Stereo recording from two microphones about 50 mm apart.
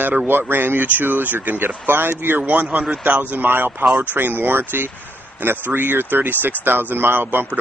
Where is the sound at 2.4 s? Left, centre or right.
Right.